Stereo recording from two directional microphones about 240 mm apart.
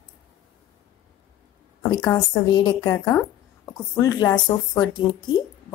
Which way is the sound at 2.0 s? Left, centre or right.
Centre.